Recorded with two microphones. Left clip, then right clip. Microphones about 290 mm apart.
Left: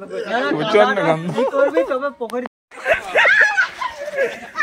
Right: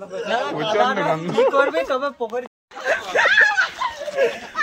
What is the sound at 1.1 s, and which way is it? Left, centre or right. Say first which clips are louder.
Speech: even; left.